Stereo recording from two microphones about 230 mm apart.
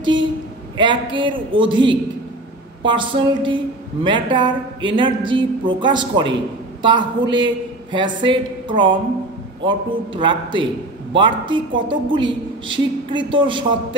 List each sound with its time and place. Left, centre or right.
0.7 s a woman's voice: right